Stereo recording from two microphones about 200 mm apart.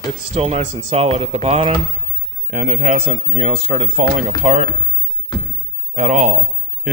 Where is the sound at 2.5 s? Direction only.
45° right (ahead or behind).